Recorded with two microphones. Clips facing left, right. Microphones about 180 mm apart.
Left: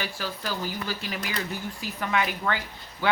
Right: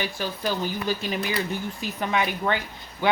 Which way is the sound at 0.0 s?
20° right (ahead or behind).